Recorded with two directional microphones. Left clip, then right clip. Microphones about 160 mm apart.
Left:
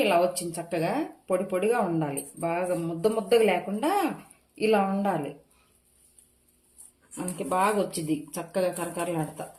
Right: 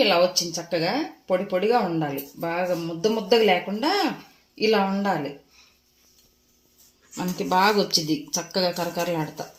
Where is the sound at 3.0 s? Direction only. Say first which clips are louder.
Right 3 dB; 25° right (ahead or behind).